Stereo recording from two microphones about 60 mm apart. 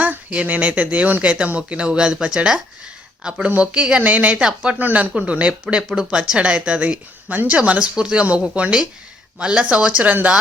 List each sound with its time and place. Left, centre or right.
0.0 s speech: right
4.8 s speech: right